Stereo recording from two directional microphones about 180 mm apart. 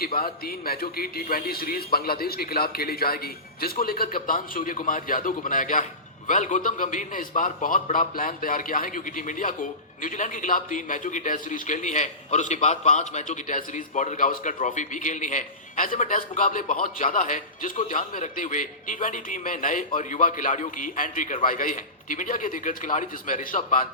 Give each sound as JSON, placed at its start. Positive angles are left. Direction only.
{"t": 0.0, "sound": "a man's voice", "side_deg": 55}